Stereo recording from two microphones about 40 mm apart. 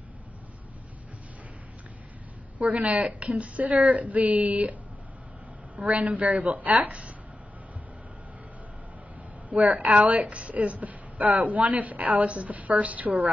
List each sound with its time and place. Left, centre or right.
2.6 s a woman's voice: right
5.8 s a woman's voice: right
9.5 s a woman's voice: centre
9.9 s a woman's voice: right